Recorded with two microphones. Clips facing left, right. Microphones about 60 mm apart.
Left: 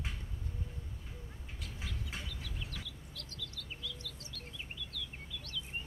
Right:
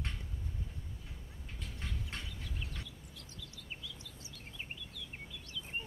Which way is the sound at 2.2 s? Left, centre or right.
Centre.